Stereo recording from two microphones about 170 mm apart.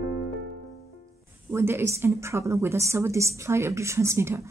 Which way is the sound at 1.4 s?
15° right (ahead or behind).